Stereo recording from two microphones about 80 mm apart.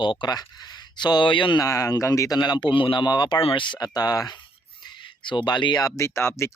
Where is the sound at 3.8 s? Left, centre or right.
Left.